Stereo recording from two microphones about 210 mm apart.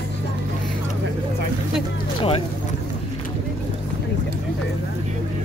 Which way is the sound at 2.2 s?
25° left (ahead or behind).